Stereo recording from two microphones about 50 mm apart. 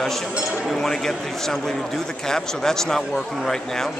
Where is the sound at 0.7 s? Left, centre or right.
Centre.